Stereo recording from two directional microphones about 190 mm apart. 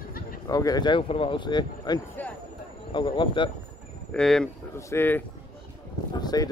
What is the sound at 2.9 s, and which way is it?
Speech, 25° left (ahead or behind).